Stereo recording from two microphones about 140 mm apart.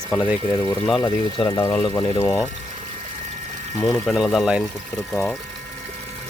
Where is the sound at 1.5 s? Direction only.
20° left (ahead or behind).